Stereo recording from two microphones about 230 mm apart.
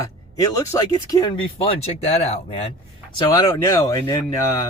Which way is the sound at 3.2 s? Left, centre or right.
Centre.